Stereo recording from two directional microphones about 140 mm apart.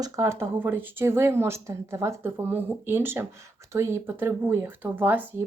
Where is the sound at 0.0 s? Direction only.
20° right (ahead or behind).